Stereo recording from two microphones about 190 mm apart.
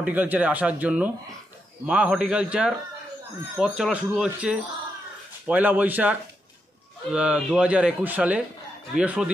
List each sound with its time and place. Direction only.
0.0 s speech: 10° right (ahead or behind)